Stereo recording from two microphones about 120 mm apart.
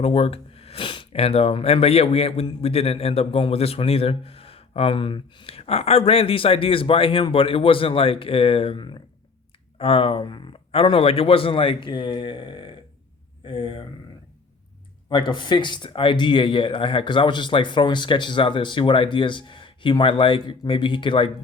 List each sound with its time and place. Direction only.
0.0 s speech: 55° left (ahead or behind)
15.1 s speech: 40° left (ahead or behind)